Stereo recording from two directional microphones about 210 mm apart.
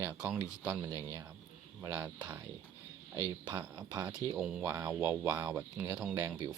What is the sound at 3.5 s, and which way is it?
Speech, 20° right (ahead or behind).